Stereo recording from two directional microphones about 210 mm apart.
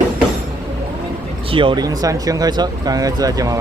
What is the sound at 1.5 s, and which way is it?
Speech, 25° right (ahead or behind).